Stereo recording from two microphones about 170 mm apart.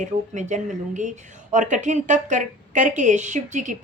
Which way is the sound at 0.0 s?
45° right (ahead or behind).